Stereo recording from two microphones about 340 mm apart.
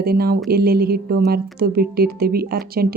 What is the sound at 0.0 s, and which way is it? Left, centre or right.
Speech, right.